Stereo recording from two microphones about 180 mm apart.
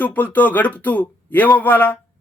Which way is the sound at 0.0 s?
10° left (ahead or behind).